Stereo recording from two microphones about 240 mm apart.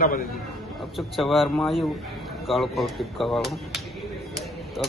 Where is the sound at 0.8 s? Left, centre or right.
Centre.